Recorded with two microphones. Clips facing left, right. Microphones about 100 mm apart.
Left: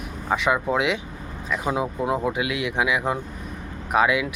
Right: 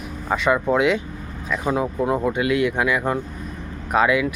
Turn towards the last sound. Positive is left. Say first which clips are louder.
# right 2 dB
turn(degrees=5)  # may be behind; listen again after turning